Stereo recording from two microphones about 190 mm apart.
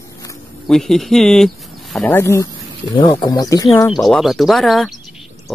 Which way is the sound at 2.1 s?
15° left (ahead or behind).